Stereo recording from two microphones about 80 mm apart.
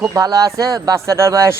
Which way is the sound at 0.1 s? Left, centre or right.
Right.